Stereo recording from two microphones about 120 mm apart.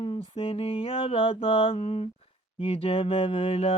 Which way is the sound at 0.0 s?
55° left (ahead or behind).